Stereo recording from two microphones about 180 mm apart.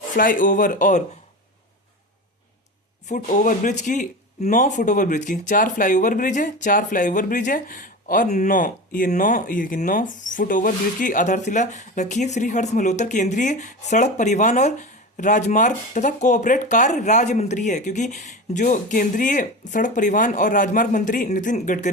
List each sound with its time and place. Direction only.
0.2 s speech: 50° left (ahead or behind)
3.1 s speech: 45° left (ahead or behind)